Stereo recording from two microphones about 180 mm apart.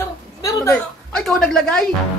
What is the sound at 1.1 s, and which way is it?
Speech, centre (ahead or behind).